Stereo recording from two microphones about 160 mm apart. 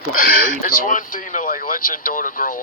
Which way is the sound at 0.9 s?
55° left (ahead or behind).